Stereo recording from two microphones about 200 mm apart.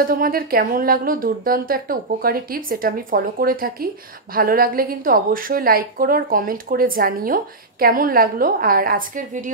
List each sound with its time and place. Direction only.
0.0 s speech: 45° right (ahead or behind)